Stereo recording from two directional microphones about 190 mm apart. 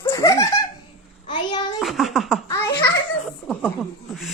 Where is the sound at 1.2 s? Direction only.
25° left (ahead or behind).